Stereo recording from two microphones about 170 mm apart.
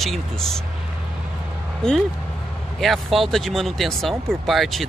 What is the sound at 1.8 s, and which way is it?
Speech, 5° left (ahead or behind).